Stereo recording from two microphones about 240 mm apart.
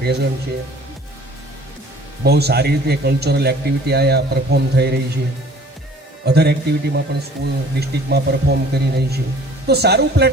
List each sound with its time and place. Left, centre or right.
0.0 s speech: right
2.2 s speech: right
6.2 s speech: right